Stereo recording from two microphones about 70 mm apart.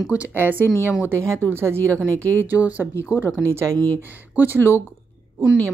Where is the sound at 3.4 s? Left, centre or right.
Right.